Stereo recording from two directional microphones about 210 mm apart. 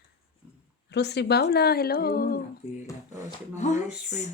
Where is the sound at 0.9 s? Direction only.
55° left (ahead or behind).